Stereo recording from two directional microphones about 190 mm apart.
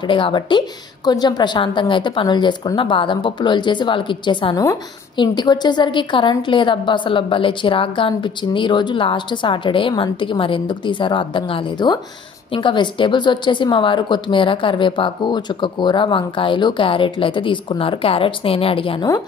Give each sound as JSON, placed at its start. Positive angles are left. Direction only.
{"t": 0.1, "sound": "a woman's voice", "side_deg": 25}